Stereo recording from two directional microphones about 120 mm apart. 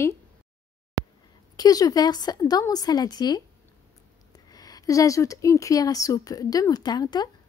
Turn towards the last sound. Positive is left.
turn(degrees=35)  # may be behind; listen again after turning